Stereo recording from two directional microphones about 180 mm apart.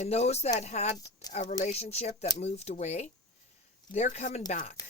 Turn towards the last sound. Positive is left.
turn(degrees=45)  # may be behind; listen again after turning